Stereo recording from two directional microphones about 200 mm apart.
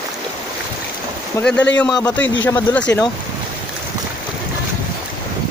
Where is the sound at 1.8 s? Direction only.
20° left (ahead or behind).